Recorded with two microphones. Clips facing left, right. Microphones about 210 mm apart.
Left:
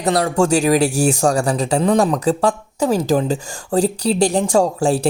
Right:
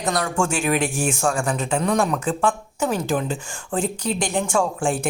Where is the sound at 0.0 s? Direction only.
35° left (ahead or behind).